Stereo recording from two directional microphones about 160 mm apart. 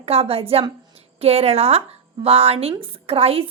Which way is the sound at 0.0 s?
40° right (ahead or behind).